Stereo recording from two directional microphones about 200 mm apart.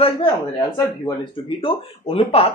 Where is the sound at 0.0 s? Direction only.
30° left (ahead or behind).